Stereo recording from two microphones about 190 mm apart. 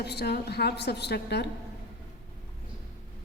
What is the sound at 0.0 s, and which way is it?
A woman's voice, 60° left (ahead or behind).